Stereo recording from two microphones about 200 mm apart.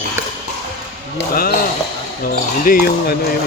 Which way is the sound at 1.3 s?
45° left (ahead or behind).